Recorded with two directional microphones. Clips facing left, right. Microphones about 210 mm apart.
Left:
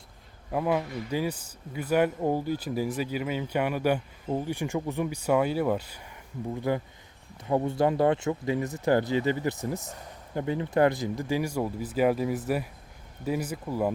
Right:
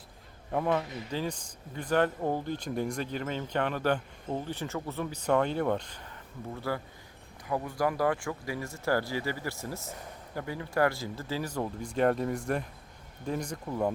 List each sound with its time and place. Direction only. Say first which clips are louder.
0.5 s speech: left 2 dB; 5° left (ahead or behind)